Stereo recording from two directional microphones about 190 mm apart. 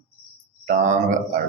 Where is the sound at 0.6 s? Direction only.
40° right (ahead or behind).